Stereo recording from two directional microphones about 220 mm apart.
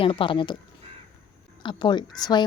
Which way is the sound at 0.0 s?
25° left (ahead or behind).